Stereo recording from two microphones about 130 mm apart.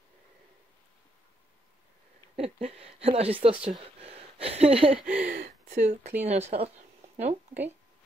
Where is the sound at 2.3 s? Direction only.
50° right (ahead or behind).